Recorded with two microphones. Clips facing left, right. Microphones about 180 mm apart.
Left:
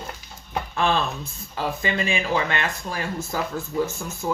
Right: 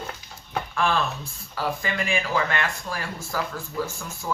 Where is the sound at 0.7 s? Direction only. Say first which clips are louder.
Left 2 dB; 20° left (ahead or behind).